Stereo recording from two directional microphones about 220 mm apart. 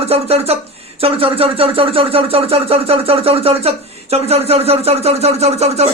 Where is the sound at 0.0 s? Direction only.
30° right (ahead or behind).